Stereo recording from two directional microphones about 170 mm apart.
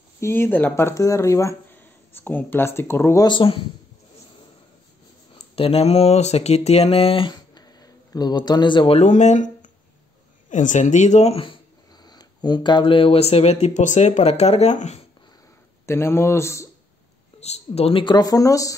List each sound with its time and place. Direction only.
0.2 s speech: 15° left (ahead or behind); by 3.6 s 30° left (ahead or behind)
5.3 s mantra: 35° left (ahead or behind)
10.5 s speech: 45° left (ahead or behind)
12.0 s speech: 25° left (ahead or behind); by 15.0 s 40° left (ahead or behind)
15.8 s speech: 15° left (ahead or behind)
17.4 s speech: 40° left (ahead or behind); by 18.8 s 20° left (ahead or behind)